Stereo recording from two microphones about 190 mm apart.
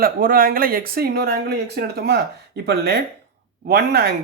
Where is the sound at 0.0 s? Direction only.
50° right (ahead or behind).